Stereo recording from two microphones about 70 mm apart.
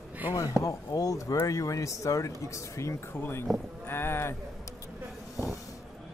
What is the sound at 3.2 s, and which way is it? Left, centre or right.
Speech, left.